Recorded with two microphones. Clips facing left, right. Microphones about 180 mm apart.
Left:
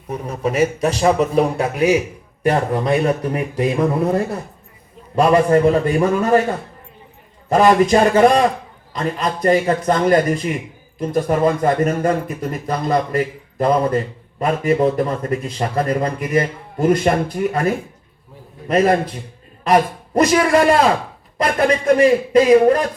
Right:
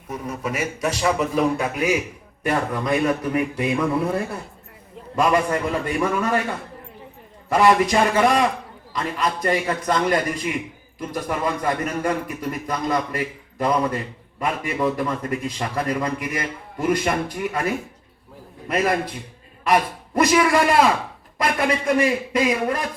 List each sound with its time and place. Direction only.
0.1 s a man's voice: 35° left (ahead or behind)
18.7 s a man's voice: 40° left (ahead or behind)